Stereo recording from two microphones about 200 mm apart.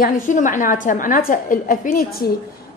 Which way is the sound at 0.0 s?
40° left (ahead or behind).